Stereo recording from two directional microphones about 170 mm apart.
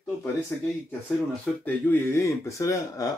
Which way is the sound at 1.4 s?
10° left (ahead or behind).